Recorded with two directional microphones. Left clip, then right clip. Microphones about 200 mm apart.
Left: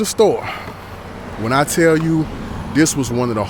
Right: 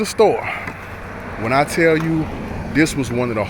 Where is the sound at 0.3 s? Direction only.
40° left (ahead or behind).